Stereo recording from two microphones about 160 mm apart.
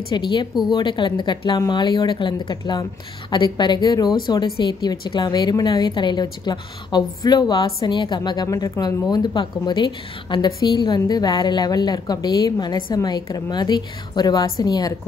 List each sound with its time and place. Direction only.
0.1 s a woman's voice: 30° left (ahead or behind)